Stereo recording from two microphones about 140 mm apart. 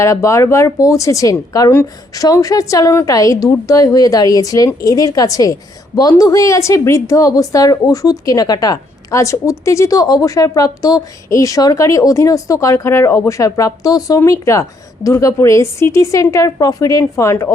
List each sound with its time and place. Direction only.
0.0 s a woman's voice: 20° left (ahead or behind)